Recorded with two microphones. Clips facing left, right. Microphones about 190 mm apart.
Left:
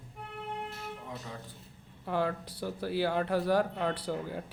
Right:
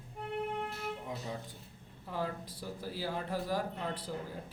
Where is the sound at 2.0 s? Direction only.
70° left (ahead or behind).